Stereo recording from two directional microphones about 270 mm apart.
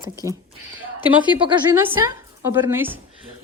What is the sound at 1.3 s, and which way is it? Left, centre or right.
A woman's voice, centre.